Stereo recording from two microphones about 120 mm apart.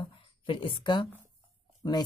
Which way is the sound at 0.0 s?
45° left (ahead or behind).